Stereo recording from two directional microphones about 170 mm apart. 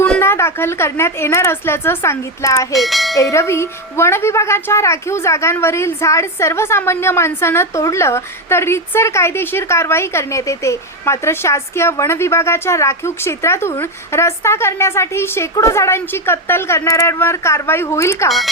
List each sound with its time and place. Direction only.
0.0 s a woman's voice: 10° left (ahead or behind)
2.7 s speech: centre (ahead or behind)
3.2 s a woman's voice: 15° left (ahead or behind)